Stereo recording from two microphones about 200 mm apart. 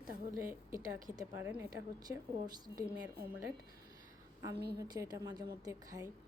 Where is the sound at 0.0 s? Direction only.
15° right (ahead or behind).